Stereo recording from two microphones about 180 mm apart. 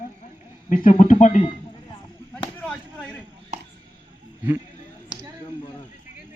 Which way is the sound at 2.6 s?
5° left (ahead or behind).